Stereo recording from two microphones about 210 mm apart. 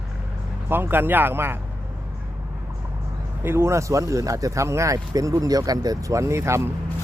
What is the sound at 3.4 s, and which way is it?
Speech, 10° right (ahead or behind).